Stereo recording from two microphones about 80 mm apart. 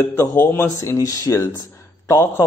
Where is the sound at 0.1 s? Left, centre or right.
Left.